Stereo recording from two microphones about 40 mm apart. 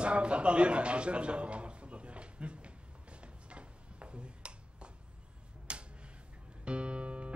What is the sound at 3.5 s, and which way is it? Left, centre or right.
Tick-tock, right.